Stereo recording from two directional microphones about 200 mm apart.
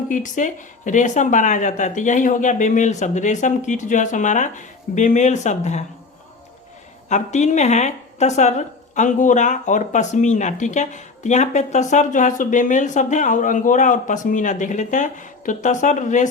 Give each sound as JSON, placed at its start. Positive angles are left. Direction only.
{"t": 0.1, "sound": "speech", "side_deg": 40}
{"t": 7.1, "sound": "speech", "side_deg": 35}